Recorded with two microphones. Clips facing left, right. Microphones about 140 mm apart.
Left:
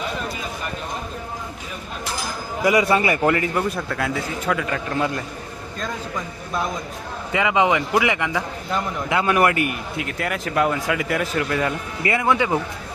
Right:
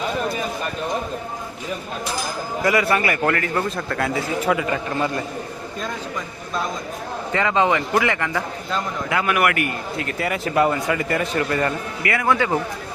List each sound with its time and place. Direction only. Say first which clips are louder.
2.6 s a man's voice: left 2 dB; 20° left (ahead or behind); by 5.2 s centre (ahead or behind)
7.3 s a man's voice: even; 15° left (ahead or behind)
9.0 s a man's voice: left 2 dB; 25° left (ahead or behind)
10.0 s a man's voice: right 2 dB; centre (ahead or behind)
12.0 s a man's voice: even; 20° left (ahead or behind)